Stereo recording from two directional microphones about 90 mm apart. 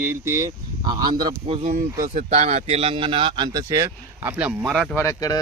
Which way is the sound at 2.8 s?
85° right.